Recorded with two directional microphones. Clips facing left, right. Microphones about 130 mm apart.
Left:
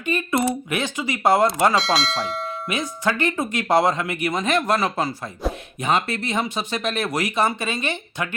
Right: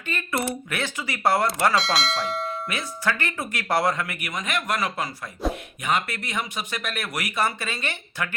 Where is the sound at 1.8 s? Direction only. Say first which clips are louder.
Left 3 dB; centre (ahead or behind).